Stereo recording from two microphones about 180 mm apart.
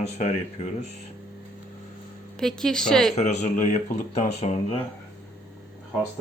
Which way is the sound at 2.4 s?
5° left (ahead or behind).